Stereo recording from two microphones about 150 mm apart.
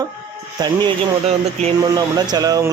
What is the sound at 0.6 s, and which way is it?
Speech, 30° right (ahead or behind).